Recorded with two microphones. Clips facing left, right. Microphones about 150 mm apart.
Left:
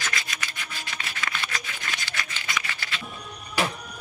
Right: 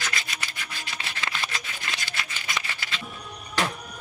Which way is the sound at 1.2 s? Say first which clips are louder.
Right 1 dB; 30° right (ahead or behind).